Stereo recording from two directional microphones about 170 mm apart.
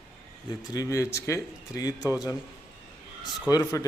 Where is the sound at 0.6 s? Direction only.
20° left (ahead or behind).